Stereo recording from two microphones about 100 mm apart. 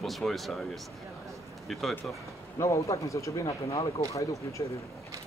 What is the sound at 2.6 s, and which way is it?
Speech, 30° left (ahead or behind).